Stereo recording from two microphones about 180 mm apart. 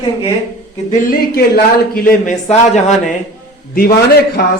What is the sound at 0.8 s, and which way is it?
Speech, 50° left (ahead or behind).